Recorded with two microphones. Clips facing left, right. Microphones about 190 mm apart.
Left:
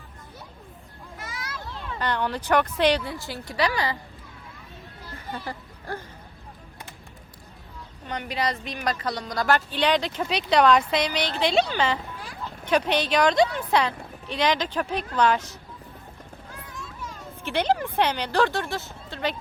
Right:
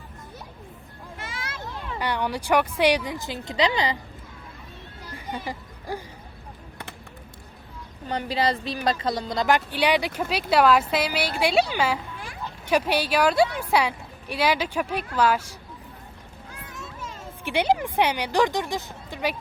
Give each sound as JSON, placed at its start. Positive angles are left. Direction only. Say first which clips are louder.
{"t": 1.2, "sound": "a sound", "louder": "right 1 dB", "side_deg": -25}
{"t": 2.0, "sound": "a woman's voice", "louder": "even", "side_deg": -10}
{"t": 5.3, "sound": "speech", "louder": "right 2 dB", "side_deg": -15}
{"t": 8.0, "sound": "a woman's voice", "louder": "right 4 dB", "side_deg": -35}
{"t": 16.7, "sound": "children playing", "louder": "right 1 dB", "side_deg": -25}
{"t": 17.4, "sound": "a woman's voice", "louder": "right 1 dB", "side_deg": -10}